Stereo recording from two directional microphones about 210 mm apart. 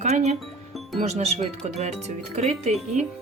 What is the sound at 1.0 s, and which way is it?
Speech, 30° right (ahead or behind).